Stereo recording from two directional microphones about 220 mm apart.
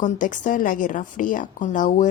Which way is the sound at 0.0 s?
35° left (ahead or behind).